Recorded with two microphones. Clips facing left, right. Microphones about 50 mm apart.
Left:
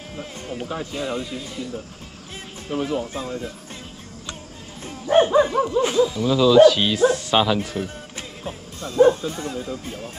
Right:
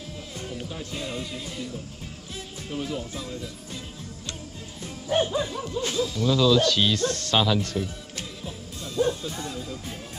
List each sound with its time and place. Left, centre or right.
0.1 s music: left
2.7 s speech: left
4.8 s dog: left
5.7 s speech: left
8.5 s speech: left